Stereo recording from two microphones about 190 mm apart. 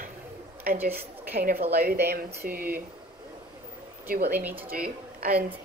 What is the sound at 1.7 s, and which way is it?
Speech, 55° right (ahead or behind).